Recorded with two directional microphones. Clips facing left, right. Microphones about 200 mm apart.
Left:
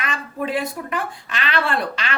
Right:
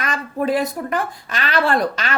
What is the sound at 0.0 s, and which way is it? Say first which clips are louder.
A woman's voice: right 4 dB; 40° right (ahead or behind).